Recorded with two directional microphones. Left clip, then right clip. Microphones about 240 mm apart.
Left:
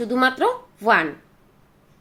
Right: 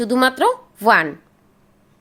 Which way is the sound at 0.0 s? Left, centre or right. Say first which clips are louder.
Right 3 dB; right.